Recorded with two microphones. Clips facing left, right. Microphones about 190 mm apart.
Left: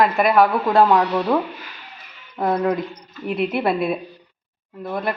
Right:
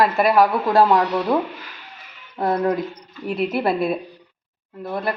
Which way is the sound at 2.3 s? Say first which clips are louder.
Even; centre (ahead or behind).